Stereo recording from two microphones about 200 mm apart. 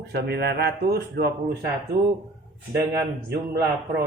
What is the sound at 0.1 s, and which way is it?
Speech, 55° right (ahead or behind).